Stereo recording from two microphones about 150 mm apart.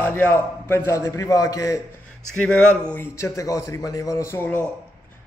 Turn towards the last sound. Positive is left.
turn(degrees=15)  # may be behind; listen again after turning